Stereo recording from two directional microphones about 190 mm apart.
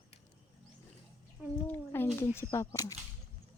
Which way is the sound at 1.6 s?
10° left (ahead or behind).